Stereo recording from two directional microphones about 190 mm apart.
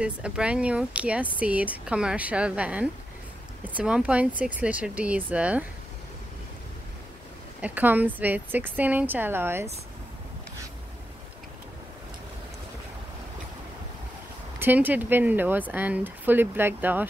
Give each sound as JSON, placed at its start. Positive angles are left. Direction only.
{"t": 0.0, "sound": "speech", "side_deg": -5}
{"t": 7.6, "sound": "speech", "side_deg": -10}
{"t": 14.6, "sound": "speech", "side_deg": -10}